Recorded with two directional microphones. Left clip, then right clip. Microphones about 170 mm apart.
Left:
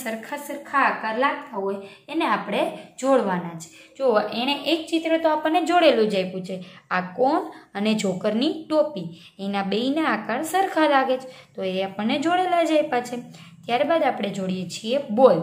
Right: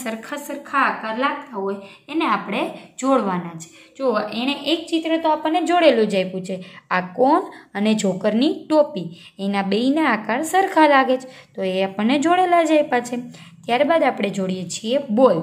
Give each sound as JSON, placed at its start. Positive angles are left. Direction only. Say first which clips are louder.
{"t": 0.0, "sound": "a woman's voice", "louder": "right 2 dB", "side_deg": -30}
{"t": 0.8, "sound": "a woman's voice", "louder": "even", "side_deg": -10}